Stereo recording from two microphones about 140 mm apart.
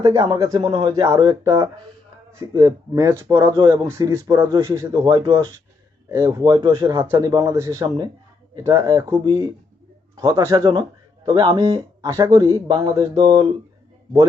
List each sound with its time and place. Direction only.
0.0 s speech: 30° right (ahead or behind)
0.6 s speech: 35° right (ahead or behind); by 3.5 s 20° right (ahead or behind)
3.5 s speech: 35° right (ahead or behind)
3.8 s speech: 20° right (ahead or behind)